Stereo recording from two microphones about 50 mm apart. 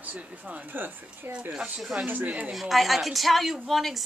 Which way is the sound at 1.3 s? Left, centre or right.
Right.